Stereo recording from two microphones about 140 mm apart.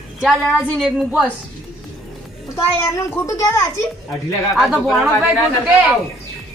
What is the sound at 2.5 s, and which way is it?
A child's voice, 20° left (ahead or behind).